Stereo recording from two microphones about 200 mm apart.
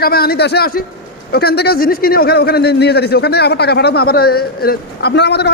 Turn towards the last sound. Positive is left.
turn(degrees=55)  # may be behind; listen again after turning